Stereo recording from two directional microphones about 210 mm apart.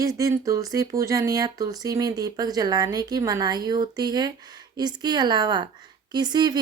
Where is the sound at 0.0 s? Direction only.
15° right (ahead or behind).